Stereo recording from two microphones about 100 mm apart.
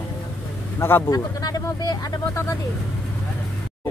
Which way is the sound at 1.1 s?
40° left (ahead or behind).